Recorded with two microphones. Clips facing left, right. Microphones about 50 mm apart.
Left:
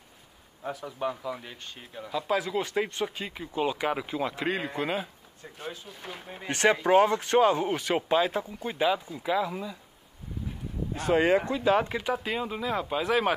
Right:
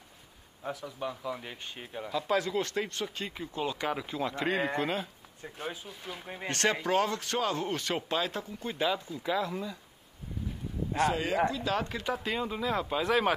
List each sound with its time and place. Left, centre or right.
0.7 s speech: centre
1.4 s speech: centre
2.0 s speech: centre
4.1 s speech: centre
5.4 s speech: centre
5.9 s speech: centre; by 7.6 s left
7.6 s speech: centre
11.1 s speech: left
11.5 s speech: left
12.0 s speech: centre